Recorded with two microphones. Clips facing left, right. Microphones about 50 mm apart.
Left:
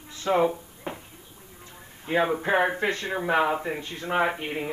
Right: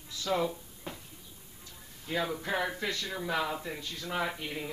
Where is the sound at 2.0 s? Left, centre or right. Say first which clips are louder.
Left 9 dB; left.